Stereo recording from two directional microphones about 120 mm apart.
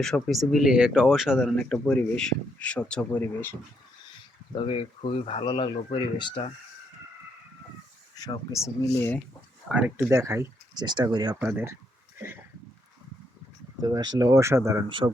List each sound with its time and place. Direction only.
0.0 s speech: centre (ahead or behind)
1.5 s speech: 10° left (ahead or behind)
4.5 s speech: 45° left (ahead or behind)
8.2 s speech: 30° left (ahead or behind)
9.6 s speech: 10° right (ahead or behind)
10.1 s speech: 25° right (ahead or behind)
10.8 s speech: 35° right (ahead or behind)
11.3 s speech: 15° right (ahead or behind)
13.8 s speech: 30° right (ahead or behind)
14.8 s speech: 45° right (ahead or behind)